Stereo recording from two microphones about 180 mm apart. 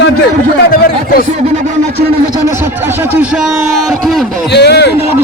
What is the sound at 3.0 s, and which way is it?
A man's voice, 10° right (ahead or behind).